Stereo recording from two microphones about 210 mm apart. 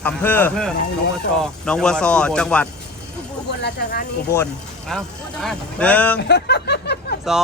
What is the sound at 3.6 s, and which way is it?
Speech, 40° left (ahead or behind).